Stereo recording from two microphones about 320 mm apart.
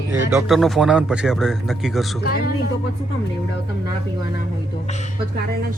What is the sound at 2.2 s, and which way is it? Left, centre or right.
Speech, left.